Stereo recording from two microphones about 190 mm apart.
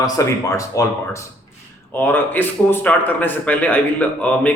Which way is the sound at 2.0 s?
10° left (ahead or behind).